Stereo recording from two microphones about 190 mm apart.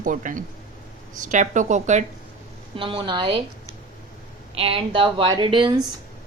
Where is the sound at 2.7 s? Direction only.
25° right (ahead or behind).